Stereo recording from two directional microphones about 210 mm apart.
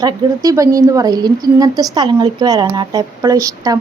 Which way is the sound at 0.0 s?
15° right (ahead or behind).